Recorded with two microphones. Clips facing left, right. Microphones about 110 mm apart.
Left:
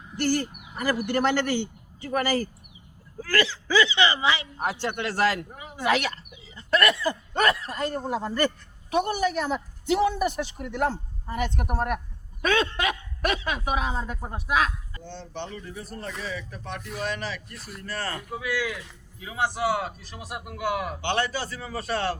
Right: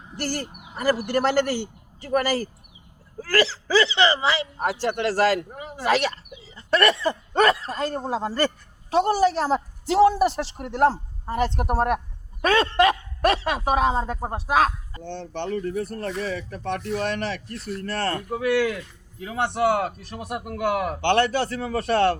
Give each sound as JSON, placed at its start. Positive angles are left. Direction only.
{"t": 0.2, "sound": "speech", "side_deg": -40}
{"t": 15.0, "sound": "a man's voice", "side_deg": -60}